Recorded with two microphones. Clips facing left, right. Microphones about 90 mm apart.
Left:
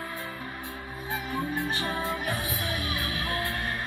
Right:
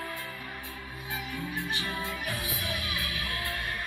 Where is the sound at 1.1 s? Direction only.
35° left (ahead or behind).